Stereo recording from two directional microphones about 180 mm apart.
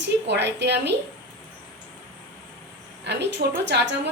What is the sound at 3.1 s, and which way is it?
A woman's voice, 70° right (ahead or behind).